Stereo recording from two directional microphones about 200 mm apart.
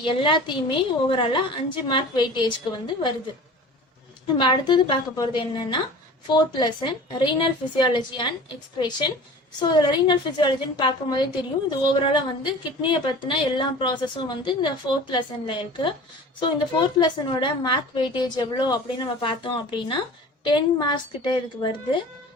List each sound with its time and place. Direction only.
0.0 s a woman's voice: 25° left (ahead or behind)
4.4 s a woman's voice: 25° left (ahead or behind)